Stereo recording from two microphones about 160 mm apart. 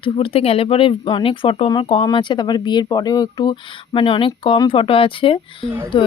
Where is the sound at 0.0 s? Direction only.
35° left (ahead or behind).